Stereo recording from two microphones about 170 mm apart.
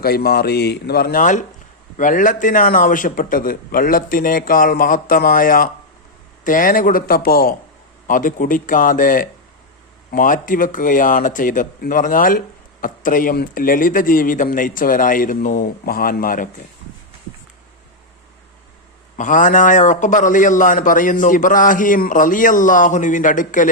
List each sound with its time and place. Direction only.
0.0 s a man's voice: 65° left (ahead or behind)
8.0 s a man's voice: 50° left (ahead or behind)
19.1 s a man's voice: 50° left (ahead or behind)